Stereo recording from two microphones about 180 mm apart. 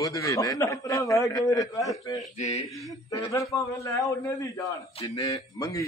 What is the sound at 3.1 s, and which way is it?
A man's voice, 20° left (ahead or behind).